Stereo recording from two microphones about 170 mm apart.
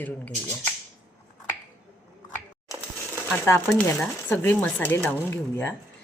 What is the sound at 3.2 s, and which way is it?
Speech, 10° left (ahead or behind).